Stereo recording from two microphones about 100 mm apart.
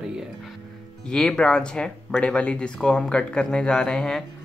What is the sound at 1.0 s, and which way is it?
Speech, 5° left (ahead or behind).